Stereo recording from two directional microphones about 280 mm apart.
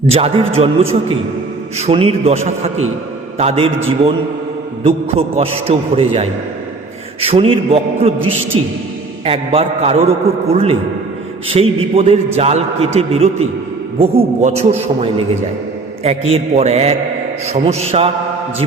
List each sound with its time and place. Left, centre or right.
0.1 s a man's voice: right
4.8 s a man's voice: right